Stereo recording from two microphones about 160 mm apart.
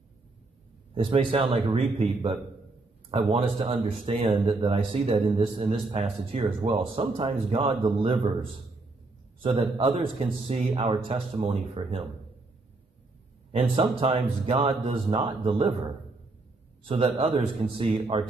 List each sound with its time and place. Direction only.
0.9 s speech: 35° right (ahead or behind)
13.5 s speech: 35° right (ahead or behind)
16.8 s speech: 35° right (ahead or behind)